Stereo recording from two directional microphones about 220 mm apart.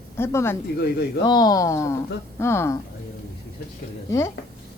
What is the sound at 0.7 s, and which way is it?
Speech, 50° left (ahead or behind).